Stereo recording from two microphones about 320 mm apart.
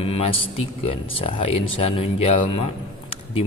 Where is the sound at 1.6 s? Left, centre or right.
Left.